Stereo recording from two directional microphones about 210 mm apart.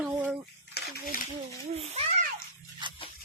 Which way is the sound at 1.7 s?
30° right (ahead or behind).